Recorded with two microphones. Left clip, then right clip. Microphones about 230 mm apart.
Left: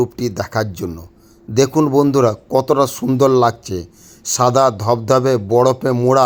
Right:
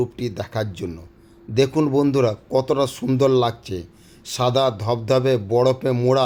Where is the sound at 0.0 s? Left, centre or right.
Left.